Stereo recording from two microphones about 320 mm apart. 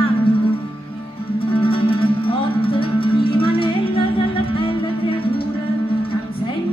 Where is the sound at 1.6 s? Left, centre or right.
Centre.